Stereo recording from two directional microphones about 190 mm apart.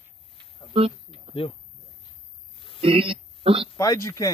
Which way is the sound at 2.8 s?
30° right (ahead or behind).